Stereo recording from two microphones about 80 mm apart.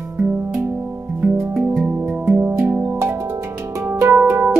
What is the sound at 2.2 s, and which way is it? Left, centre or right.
Music, right.